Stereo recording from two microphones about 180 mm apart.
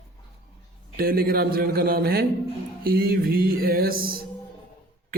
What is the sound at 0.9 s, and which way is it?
A man's voice, 55° right (ahead or behind).